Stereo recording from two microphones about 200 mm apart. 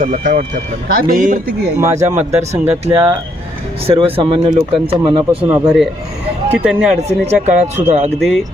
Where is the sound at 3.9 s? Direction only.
30° right (ahead or behind).